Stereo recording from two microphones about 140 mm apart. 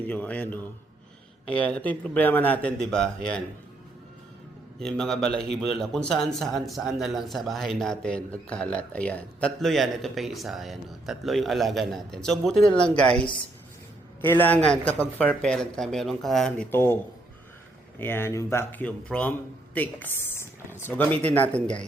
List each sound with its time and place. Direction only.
0.0 s speech: 10° left (ahead or behind)
4.8 s speech: 5° left (ahead or behind)
16.7 s speech: 15° left (ahead or behind)
18.0 s speech: 15° left (ahead or behind)